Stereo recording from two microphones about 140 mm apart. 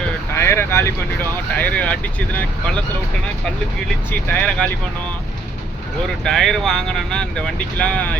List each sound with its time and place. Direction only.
0.3 s boat: 20° left (ahead or behind)
1.5 s speech: 10° left (ahead or behind)
4.1 s speech: 15° left (ahead or behind)
6.2 s speech: 5° left (ahead or behind)